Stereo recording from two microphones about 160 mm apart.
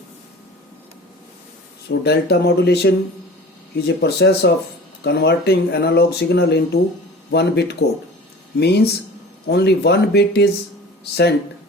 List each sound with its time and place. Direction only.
1.9 s speech: 90° left